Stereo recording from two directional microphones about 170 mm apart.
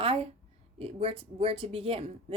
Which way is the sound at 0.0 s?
35° right (ahead or behind).